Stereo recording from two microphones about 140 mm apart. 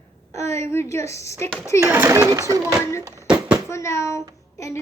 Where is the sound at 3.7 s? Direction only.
20° left (ahead or behind).